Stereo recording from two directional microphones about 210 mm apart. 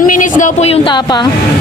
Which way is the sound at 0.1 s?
40° left (ahead or behind).